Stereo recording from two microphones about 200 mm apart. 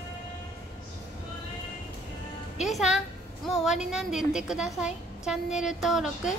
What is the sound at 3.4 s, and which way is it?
A woman's voice, centre (ahead or behind).